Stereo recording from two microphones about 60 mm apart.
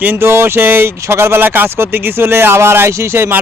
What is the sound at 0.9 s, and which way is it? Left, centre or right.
Speech, right.